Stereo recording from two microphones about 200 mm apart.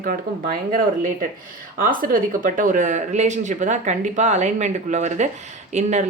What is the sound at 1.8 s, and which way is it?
Speech, 45° right (ahead or behind).